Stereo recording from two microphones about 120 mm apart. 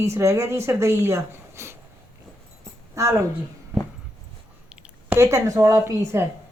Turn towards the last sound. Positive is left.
turn(degrees=-25)  # may be behind; listen again after turning